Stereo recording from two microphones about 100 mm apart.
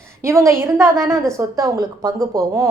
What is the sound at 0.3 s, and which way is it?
A woman's voice, 30° right (ahead or behind).